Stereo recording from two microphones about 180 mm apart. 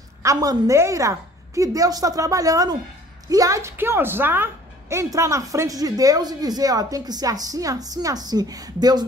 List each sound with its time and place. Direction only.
0.2 s a woman's voice: 20° right (ahead or behind)